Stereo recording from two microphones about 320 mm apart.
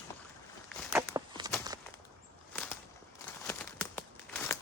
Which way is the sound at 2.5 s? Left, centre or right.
Centre.